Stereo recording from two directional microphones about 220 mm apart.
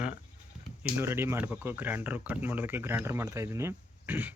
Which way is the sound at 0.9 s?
10° right (ahead or behind).